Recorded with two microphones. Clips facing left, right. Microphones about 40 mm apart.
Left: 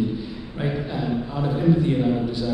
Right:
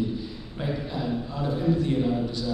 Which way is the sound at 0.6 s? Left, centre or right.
Centre.